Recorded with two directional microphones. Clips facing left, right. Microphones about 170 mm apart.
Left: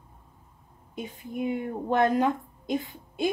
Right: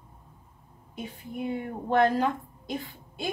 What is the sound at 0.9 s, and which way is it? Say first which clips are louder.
A woman's voice: left 2 dB; 15° left (ahead or behind).